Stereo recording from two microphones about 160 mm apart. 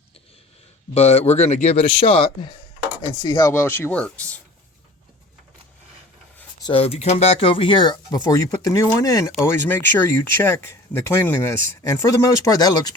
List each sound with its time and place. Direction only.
0.9 s a man's voice: 40° left (ahead or behind)
3.2 s speech: 20° left (ahead or behind)
6.7 s speech: 35° left (ahead or behind)